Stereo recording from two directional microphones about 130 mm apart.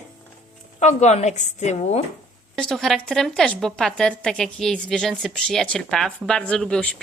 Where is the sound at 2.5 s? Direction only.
5° left (ahead or behind).